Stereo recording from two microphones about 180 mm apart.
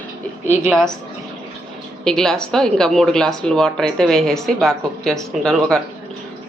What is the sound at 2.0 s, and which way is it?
A woman's voice, 5° left (ahead or behind).